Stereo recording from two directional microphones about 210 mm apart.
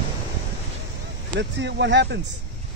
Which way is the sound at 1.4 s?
55° right (ahead or behind).